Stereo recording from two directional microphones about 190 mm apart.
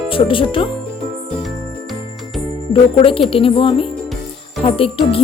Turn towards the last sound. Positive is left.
turn(degrees=30)  # may be behind; listen again after turning